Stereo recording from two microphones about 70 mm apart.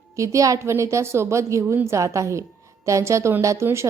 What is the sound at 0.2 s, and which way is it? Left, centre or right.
A woman's voice, right.